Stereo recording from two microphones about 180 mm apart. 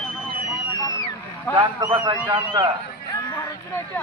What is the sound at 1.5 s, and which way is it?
Speech, 25° right (ahead or behind).